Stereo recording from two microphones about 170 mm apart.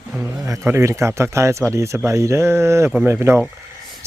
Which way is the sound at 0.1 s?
Centre (ahead or behind).